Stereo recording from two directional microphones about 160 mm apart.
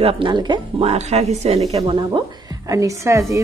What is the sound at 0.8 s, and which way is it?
A woman's voice, 45° right (ahead or behind).